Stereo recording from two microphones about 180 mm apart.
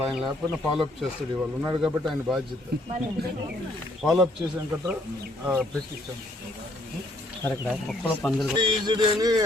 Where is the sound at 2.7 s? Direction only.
65° right (ahead or behind).